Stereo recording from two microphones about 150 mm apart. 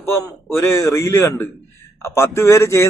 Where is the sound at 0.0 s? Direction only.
15° left (ahead or behind).